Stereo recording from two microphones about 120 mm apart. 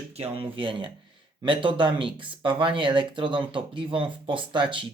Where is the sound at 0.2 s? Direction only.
45° right (ahead or behind).